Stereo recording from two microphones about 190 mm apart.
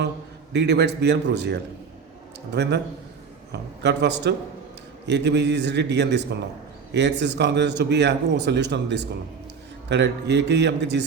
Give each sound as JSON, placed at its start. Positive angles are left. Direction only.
{"t": 0.5, "sound": "a man's voice", "side_deg": -65}